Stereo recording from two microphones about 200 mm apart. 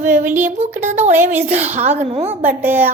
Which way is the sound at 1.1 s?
10° right (ahead or behind).